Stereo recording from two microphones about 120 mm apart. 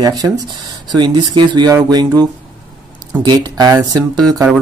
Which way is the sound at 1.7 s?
25° right (ahead or behind).